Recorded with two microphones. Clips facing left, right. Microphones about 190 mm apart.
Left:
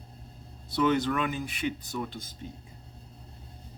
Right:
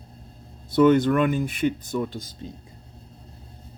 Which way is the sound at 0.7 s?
50° right (ahead or behind).